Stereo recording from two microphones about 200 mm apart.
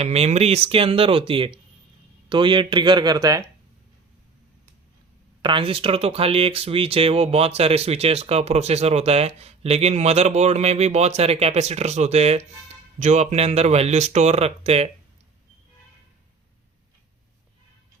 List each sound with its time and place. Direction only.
0.0 s speech: 30° right (ahead or behind)
5.4 s speech: 25° right (ahead or behind)